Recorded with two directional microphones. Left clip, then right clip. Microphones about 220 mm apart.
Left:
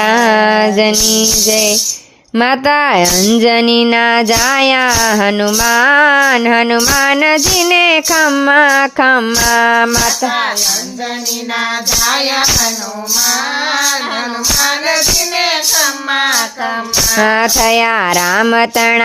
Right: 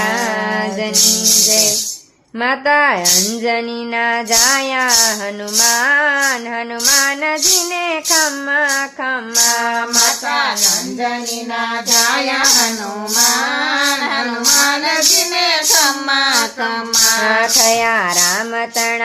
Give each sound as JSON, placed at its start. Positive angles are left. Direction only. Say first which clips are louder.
{"t": 0.0, "sound": "music", "louder": "left 8 dB", "side_deg": 45}
{"t": 2.4, "sound": "speech", "louder": "left 3 dB", "side_deg": 50}
{"t": 15.8, "sound": "child singing", "louder": "left 1 dB", "side_deg": -40}
{"t": 17.2, "sound": "speech", "louder": "left 2 dB", "side_deg": 55}